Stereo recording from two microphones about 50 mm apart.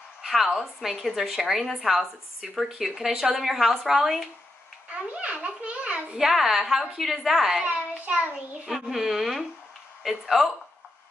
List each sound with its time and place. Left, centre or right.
0.2 s a woman's voice: centre
5.1 s a child's voice: right
6.1 s speech: centre
7.6 s child singing: right
8.6 s a woman's voice: centre